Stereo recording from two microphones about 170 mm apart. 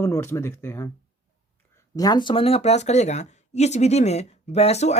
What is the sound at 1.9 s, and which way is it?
Speech, 25° left (ahead or behind).